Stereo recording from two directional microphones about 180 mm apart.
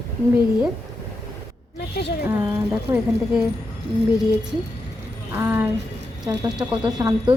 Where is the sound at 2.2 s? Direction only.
10° right (ahead or behind).